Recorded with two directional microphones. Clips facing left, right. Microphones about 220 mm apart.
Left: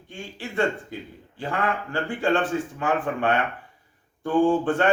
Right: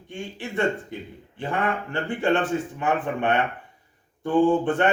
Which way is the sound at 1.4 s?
20° right (ahead or behind).